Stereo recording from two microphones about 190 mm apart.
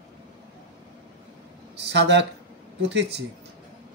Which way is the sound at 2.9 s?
65° right (ahead or behind).